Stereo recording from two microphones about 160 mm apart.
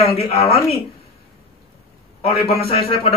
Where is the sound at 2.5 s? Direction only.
35° left (ahead or behind).